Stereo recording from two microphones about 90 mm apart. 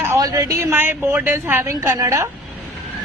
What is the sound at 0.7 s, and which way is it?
A woman's voice, 25° right (ahead or behind).